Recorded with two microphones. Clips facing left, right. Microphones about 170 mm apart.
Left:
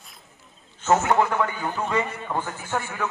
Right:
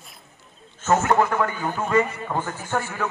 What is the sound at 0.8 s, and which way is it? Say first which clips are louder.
Speech: right 1 dB; 15° left (ahead or behind).